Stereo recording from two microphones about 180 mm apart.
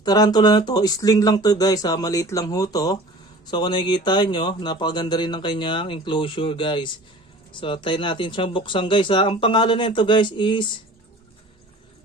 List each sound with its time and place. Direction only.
0.0 s speech: 20° left (ahead or behind)